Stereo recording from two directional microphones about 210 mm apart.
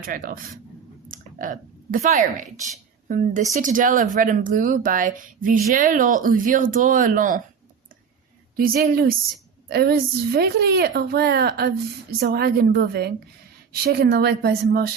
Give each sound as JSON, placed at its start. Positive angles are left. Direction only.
{"t": 0.0, "sound": "speech", "side_deg": -40}
{"t": 8.5, "sound": "speech", "side_deg": -45}